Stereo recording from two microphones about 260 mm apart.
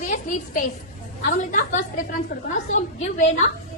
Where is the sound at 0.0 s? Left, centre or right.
Left.